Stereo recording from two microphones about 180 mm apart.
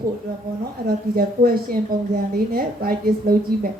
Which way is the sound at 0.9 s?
55° right (ahead or behind).